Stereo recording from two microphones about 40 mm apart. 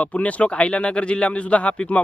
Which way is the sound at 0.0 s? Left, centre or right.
Left.